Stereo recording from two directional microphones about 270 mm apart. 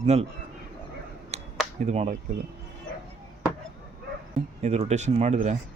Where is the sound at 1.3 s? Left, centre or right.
Right.